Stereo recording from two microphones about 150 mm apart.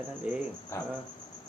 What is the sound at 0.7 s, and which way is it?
Speech, 15° left (ahead or behind).